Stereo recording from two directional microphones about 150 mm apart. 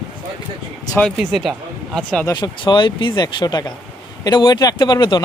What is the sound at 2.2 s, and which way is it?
Speech, 30° left (ahead or behind).